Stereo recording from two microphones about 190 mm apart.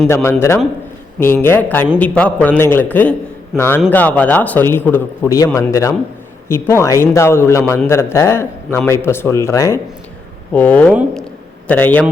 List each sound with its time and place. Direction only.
0.1 s a man's voice: 10° left (ahead or behind)
3.5 s a man's voice: centre (ahead or behind)
3.8 s a man's voice: 10° left (ahead or behind)